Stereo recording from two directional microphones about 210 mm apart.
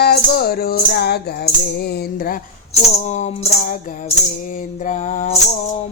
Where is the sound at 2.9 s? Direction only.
30° left (ahead or behind).